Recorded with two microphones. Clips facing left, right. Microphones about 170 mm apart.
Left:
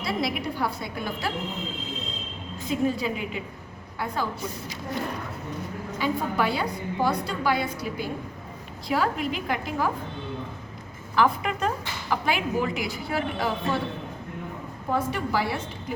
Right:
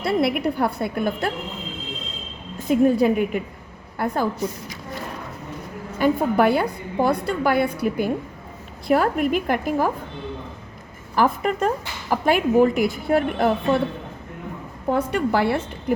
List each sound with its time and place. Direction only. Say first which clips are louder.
0.0 s a woman's voice: right 7 dB; 60° right (ahead or behind)
2.6 s a woman's voice: right 9 dB; 55° right (ahead or behind)
6.0 s a woman's voice: right 8 dB; 55° right (ahead or behind)
11.1 s speech: right 3 dB; 45° right (ahead or behind)
14.8 s a woman's voice: right 6 dB; 60° right (ahead or behind)